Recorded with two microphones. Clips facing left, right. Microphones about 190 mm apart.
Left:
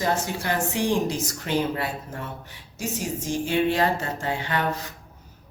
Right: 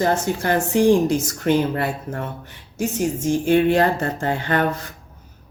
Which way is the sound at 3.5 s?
50° right (ahead or behind).